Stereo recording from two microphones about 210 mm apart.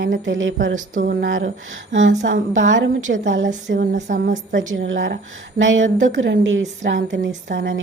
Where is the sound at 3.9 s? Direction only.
35° right (ahead or behind).